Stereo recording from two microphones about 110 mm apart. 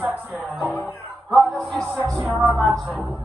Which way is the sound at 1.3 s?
Centre (ahead or behind).